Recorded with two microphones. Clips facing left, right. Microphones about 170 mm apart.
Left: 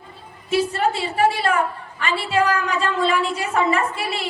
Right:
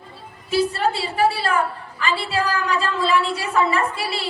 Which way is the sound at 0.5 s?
35° right (ahead or behind).